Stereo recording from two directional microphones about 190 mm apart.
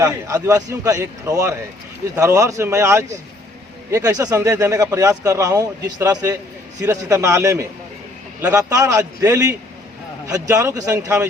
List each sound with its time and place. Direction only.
0.0 s speech: 20° right (ahead or behind)